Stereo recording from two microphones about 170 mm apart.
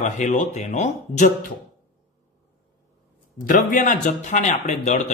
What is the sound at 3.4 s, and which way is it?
Speech, 55° left (ahead or behind).